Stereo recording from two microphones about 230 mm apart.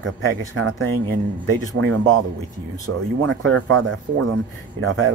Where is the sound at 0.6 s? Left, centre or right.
Right.